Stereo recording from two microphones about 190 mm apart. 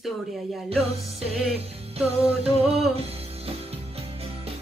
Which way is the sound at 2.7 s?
30° right (ahead or behind).